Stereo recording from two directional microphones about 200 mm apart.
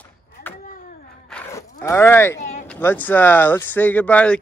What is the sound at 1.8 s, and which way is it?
Speech, 10° left (ahead or behind).